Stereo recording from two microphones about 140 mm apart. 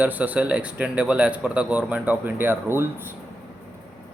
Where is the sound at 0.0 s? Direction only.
10° right (ahead or behind).